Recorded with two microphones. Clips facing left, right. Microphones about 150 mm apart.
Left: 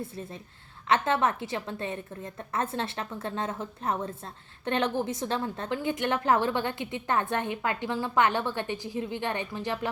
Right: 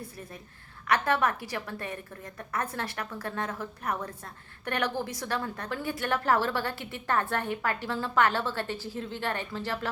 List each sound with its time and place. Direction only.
0.9 s a woman's voice: 25° left (ahead or behind)